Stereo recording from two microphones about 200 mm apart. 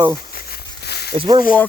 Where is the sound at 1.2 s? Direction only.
25° right (ahead or behind).